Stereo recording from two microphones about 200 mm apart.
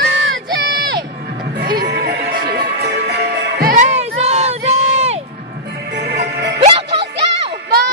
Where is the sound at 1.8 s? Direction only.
50° right (ahead or behind).